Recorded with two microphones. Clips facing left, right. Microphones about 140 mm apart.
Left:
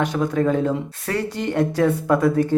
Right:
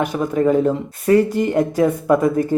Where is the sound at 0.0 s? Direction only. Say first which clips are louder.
Right 2 dB; 10° right (ahead or behind).